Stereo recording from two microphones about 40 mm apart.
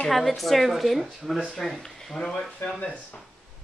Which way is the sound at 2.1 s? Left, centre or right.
Centre.